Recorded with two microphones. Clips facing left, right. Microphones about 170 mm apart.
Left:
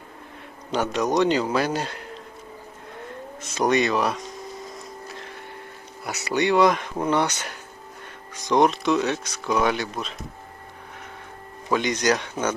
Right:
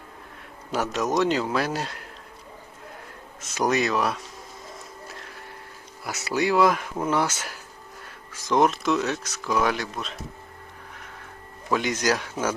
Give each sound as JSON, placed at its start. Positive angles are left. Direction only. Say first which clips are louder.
{"t": 0.7, "sound": "speech", "louder": "left 2 dB", "side_deg": 0}
{"t": 3.4, "sound": "speech", "louder": "left 2 dB", "side_deg": 0}
{"t": 5.0, "sound": "a sound", "louder": "left 3 dB", "side_deg": 0}
{"t": 6.1, "sound": "speech", "louder": "left 2 dB", "side_deg": 0}
{"t": 11.7, "sound": "speech", "louder": "left 2 dB", "side_deg": -5}